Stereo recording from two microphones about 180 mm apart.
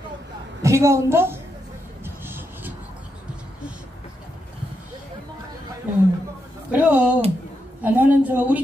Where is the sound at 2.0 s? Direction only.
10° right (ahead or behind).